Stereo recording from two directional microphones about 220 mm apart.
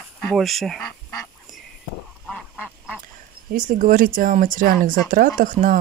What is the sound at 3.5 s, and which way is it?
Speech, 40° right (ahead or behind).